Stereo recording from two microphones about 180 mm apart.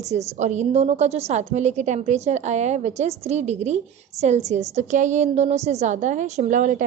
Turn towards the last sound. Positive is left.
turn(degrees=-45)  # may be behind; listen again after turning